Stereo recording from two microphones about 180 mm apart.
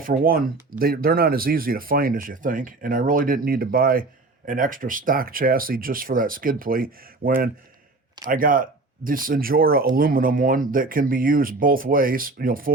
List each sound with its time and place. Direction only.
0.0 s speech: 55° right (ahead or behind)